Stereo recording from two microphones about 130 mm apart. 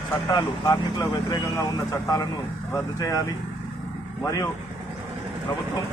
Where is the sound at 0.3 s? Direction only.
30° left (ahead or behind).